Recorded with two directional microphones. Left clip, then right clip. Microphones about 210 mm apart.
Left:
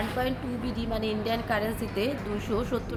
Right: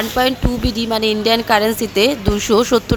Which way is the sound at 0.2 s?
55° right (ahead or behind).